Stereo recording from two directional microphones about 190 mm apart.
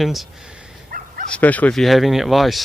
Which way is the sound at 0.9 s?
45° right (ahead or behind).